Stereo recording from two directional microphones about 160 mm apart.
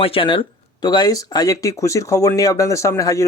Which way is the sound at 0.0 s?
35° left (ahead or behind).